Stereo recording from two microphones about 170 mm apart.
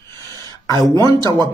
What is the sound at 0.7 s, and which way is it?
Speech, 20° left (ahead or behind).